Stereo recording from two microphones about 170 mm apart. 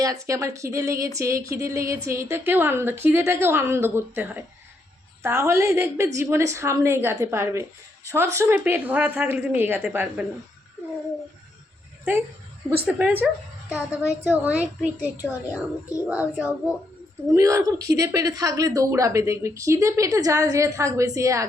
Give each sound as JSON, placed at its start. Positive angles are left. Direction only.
{"t": 0.0, "sound": "speech", "side_deg": -20}
{"t": 12.8, "sound": "speech", "side_deg": -10}